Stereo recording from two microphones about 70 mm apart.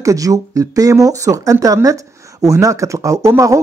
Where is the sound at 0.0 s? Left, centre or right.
Right.